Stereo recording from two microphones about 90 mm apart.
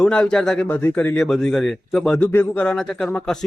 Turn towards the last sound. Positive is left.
turn(degrees=5)  # may be behind; listen again after turning